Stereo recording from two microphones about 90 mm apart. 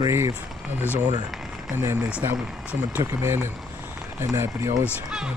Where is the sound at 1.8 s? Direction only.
30° right (ahead or behind).